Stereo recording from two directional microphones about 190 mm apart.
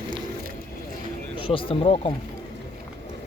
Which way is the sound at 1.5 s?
30° left (ahead or behind).